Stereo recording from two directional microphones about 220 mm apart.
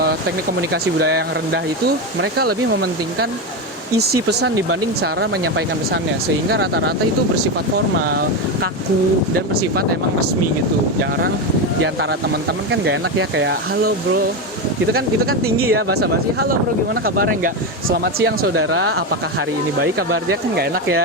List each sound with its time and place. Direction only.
0.7 s speech: 45° right (ahead or behind)
2.4 s speech: 45° right (ahead or behind)
9.6 s speech: 45° right (ahead or behind)
12.7 s speech: 60° right (ahead or behind)
15.5 s speech: 45° right (ahead or behind)
18.4 s speech: 70° right (ahead or behind)
19.8 s speech: 45° right (ahead or behind)